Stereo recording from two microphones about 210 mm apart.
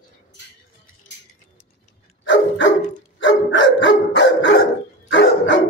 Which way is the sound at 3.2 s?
60° left (ahead or behind).